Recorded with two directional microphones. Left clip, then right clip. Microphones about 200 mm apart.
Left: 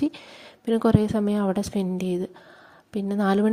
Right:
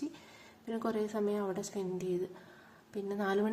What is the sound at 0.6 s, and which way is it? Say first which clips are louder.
A woman's voice: left 13 dB; 45° left (ahead or behind).